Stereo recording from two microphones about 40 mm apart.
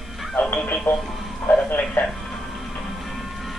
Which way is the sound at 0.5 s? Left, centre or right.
Left.